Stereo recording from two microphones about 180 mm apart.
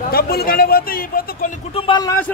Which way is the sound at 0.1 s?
60° left (ahead or behind).